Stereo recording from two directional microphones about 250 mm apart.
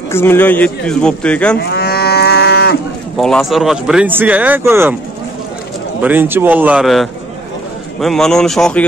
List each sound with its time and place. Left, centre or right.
0.1 s speech: centre
1.7 s cattle: left
3.2 s speech: centre
6.0 s a man's voice: centre